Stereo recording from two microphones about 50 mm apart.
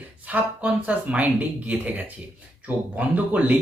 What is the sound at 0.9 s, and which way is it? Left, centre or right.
Speech, right.